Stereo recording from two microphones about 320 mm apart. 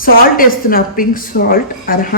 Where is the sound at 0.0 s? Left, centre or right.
Left.